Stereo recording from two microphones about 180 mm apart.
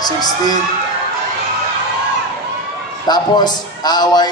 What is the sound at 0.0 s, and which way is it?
Speech, 20° left (ahead or behind).